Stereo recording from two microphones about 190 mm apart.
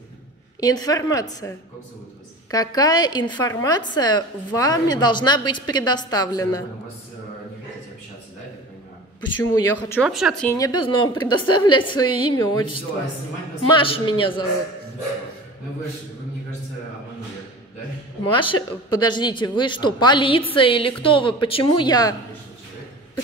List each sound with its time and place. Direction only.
0.6 s speech: 20° left (ahead or behind)
2.5 s speech: 20° left (ahead or behind)
9.4 s speech: 15° left (ahead or behind)
10.0 s a woman's voice: 5° right (ahead or behind)
10.5 s speech: 20° left (ahead or behind)
18.3 s speech: 25° left (ahead or behind)